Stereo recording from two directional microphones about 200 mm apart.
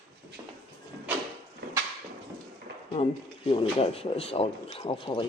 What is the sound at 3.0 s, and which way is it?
Speech, 30° left (ahead or behind).